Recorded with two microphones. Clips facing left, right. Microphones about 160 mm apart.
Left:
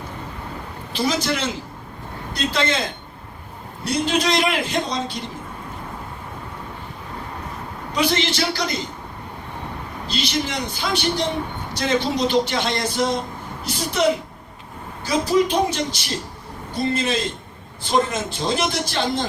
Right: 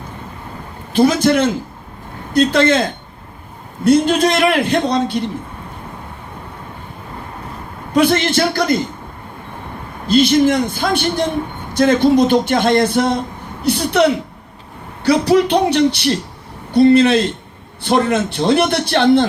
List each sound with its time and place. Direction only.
0.9 s a man's voice: 55° right (ahead or behind)
3.8 s a man's voice: 55° right (ahead or behind)
7.9 s speech: 55° right (ahead or behind)
10.1 s a man's voice: 50° right (ahead or behind)